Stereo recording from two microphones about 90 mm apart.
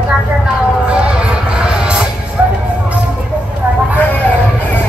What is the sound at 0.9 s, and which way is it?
Music, 10° right (ahead or behind).